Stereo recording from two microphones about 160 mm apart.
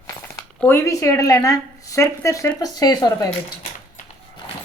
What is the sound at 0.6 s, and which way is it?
A woman's voice, 15° left (ahead or behind).